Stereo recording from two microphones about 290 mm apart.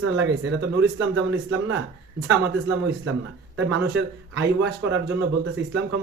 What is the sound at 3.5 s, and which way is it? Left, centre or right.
Speech, right.